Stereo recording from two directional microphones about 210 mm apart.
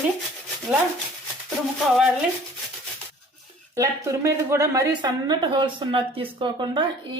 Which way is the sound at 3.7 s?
15° right (ahead or behind).